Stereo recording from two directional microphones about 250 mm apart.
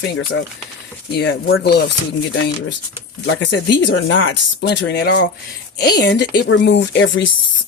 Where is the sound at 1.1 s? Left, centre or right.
Left.